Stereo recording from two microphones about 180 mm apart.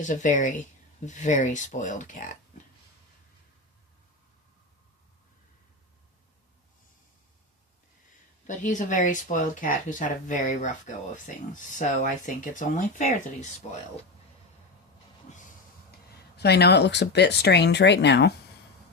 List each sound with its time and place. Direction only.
0.0 s speech: 45° left (ahead or behind)
8.4 s speech: 45° left (ahead or behind)
15.3 s vehicle: 40° left (ahead or behind)
16.4 s speech: 65° left (ahead or behind)